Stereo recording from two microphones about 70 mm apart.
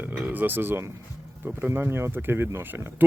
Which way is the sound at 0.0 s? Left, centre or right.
Right.